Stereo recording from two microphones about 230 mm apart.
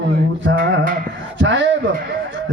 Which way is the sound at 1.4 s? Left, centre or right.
Right.